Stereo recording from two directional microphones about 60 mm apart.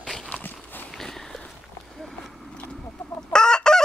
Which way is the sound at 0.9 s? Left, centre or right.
Centre.